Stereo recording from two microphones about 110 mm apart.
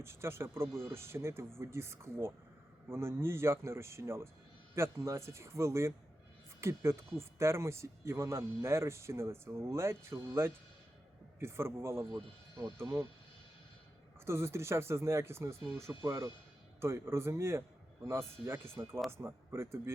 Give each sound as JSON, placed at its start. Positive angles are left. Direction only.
{"t": 0.0, "sound": "speech", "side_deg": -20}
{"t": 12.1, "sound": "speech", "side_deg": -40}
{"t": 12.7, "sound": "speech", "side_deg": -25}
{"t": 14.3, "sound": "speech", "side_deg": -25}